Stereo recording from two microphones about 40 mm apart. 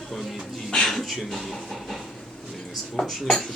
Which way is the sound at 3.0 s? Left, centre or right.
Centre.